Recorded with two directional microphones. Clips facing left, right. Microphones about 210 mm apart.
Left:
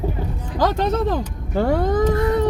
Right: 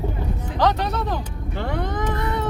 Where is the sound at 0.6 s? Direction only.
45° left (ahead or behind).